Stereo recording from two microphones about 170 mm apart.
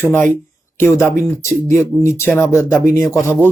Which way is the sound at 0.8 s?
15° left (ahead or behind).